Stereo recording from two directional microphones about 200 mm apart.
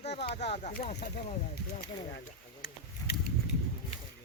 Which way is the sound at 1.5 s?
55° left (ahead or behind).